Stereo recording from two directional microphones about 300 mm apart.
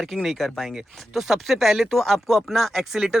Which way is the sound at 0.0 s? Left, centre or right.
Centre.